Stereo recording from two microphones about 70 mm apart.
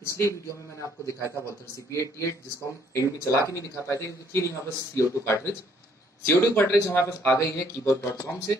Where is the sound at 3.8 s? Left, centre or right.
Left.